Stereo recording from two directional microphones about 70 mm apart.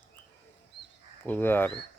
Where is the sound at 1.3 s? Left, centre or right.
Left.